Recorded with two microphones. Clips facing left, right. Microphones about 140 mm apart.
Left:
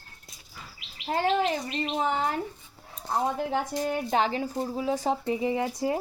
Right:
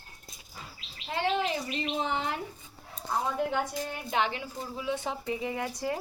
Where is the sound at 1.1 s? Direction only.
45° left (ahead or behind).